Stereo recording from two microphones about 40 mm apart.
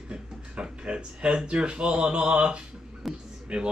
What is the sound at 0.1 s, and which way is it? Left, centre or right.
Speech, right.